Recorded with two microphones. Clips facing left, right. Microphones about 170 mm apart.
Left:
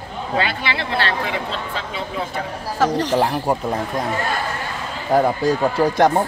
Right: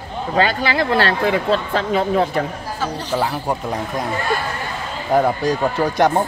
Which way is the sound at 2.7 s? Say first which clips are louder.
Left 8 dB; 90° left.